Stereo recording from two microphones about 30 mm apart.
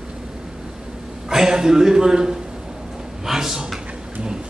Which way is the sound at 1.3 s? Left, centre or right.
Right.